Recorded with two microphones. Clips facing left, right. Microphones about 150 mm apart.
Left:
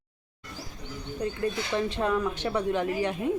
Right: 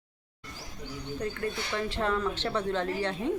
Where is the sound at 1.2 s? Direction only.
20° left (ahead or behind).